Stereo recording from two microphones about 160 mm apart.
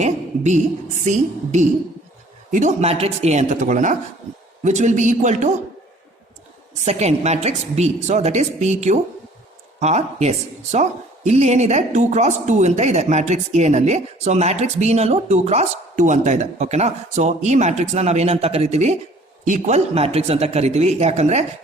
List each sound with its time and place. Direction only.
0.0 s a sound: 45° right (ahead or behind)
1.0 s speech: 45° right (ahead or behind)
6.8 s speech: 45° right (ahead or behind)